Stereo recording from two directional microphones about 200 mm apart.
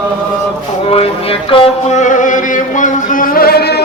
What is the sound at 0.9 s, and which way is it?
Music, 30° left (ahead or behind).